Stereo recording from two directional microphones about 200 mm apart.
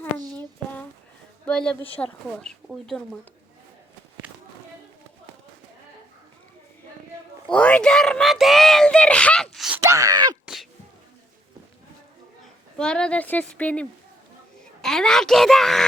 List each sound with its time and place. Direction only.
0.3 s a sound: 5° left (ahead or behind)
1.5 s speech: 5° left (ahead or behind)
7.5 s speech: 5° left (ahead or behind)
9.8 s speech: 15° right (ahead or behind)
10.4 s sneeze: centre (ahead or behind)
12.7 s speech: 5° left (ahead or behind)